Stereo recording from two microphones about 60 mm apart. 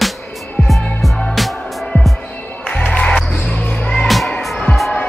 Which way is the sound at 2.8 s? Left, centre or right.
Centre.